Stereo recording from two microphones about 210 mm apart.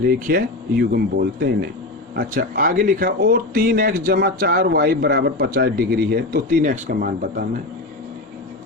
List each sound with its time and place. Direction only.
0.0 s speech: 45° right (ahead or behind)